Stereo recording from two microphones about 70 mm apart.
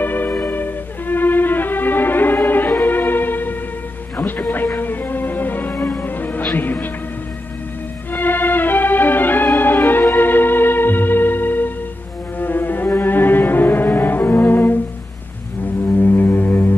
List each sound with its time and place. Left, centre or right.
0.0 s music: left
8.1 s music: left
12.4 s cello: left
15.9 s music: left